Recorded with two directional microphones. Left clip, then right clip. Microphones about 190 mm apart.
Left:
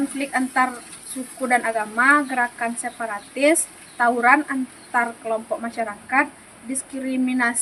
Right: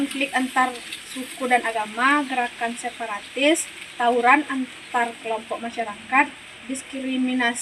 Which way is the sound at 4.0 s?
Centre (ahead or behind).